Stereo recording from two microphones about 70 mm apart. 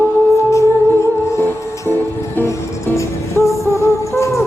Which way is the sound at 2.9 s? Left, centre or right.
Left.